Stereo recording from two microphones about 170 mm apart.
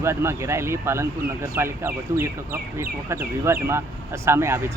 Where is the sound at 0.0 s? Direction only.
15° right (ahead or behind).